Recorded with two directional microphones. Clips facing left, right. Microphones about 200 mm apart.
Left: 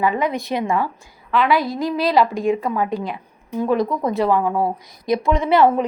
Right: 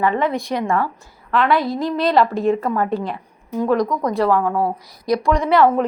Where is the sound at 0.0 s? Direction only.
15° left (ahead or behind).